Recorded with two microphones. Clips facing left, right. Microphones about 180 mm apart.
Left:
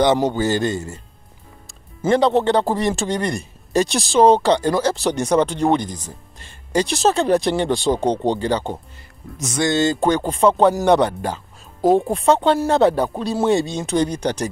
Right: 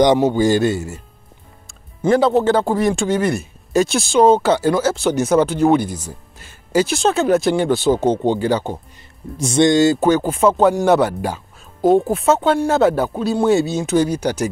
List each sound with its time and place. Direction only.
0.0 s speech: 15° right (ahead or behind)
9.4 s speech: 30° right (ahead or behind)
9.7 s speech: 10° right (ahead or behind)